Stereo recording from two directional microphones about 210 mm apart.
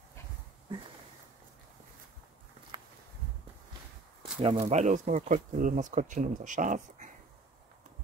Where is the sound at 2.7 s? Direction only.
20° right (ahead or behind).